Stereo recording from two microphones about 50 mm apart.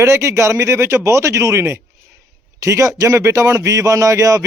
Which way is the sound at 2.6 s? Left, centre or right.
Right.